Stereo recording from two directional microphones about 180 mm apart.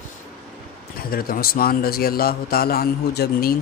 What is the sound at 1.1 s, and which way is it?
Speech, 55° left (ahead or behind).